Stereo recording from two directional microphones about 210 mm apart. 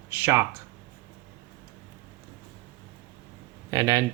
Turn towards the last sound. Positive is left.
turn(degrees=-15)  # may be behind; listen again after turning